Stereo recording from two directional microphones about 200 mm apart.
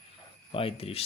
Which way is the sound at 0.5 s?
30° left (ahead or behind).